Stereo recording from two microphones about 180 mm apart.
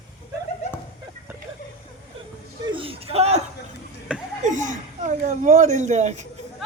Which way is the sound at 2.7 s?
30° right (ahead or behind).